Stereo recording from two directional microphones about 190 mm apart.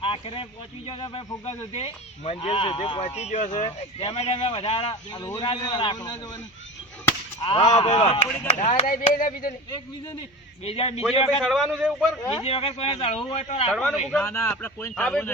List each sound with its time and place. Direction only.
0.0 s a man's voice: 30° left (ahead or behind)
7.4 s a man's voice: 25° left (ahead or behind)
8.5 s speech: 40° left (ahead or behind)
9.6 s a man's voice: 20° left (ahead or behind)
10.6 s speech: 30° left (ahead or behind)
11.3 s a man's voice: centre (ahead or behind)
12.3 s speech: 30° left (ahead or behind)
13.7 s a man's voice: 5° left (ahead or behind)